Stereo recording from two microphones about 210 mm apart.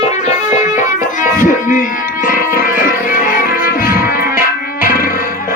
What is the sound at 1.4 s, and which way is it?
Music, 40° left (ahead or behind).